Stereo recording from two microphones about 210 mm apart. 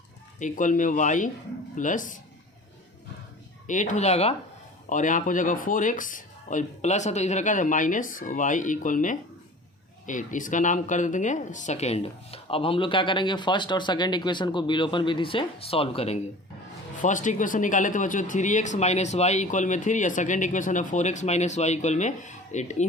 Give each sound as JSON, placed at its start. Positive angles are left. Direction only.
{"t": 0.3, "sound": "speech", "side_deg": 40}
{"t": 3.7, "sound": "speech", "side_deg": 35}
{"t": 17.0, "sound": "speech", "side_deg": 35}